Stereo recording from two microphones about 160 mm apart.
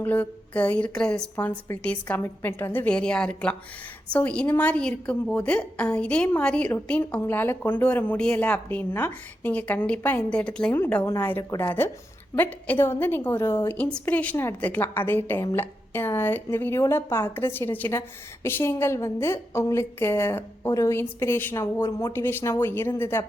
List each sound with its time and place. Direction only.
0.0 s a woman's voice: 10° left (ahead or behind)